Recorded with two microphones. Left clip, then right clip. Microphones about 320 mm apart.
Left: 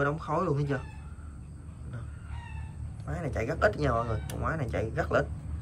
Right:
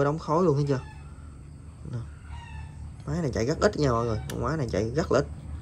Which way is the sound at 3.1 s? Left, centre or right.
Centre.